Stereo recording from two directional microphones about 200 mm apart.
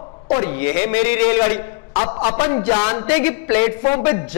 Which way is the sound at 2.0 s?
25° left (ahead or behind).